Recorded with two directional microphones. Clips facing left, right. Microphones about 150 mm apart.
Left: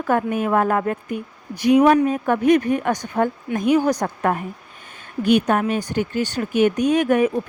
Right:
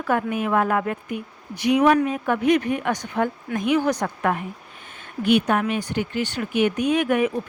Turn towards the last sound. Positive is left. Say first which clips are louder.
# left 3 dB
turn(degrees=40)  # may be behind; listen again after turning